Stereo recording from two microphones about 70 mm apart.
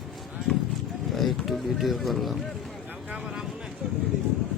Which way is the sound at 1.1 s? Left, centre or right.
Centre.